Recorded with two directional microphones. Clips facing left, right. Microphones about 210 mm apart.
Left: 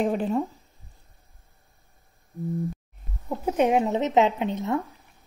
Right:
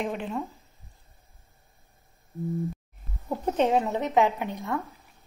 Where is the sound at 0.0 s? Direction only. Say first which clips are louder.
Left 6 dB; 40° left (ahead or behind).